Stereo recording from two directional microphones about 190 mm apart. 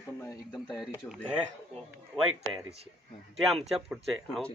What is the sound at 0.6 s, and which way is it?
Speech, centre (ahead or behind).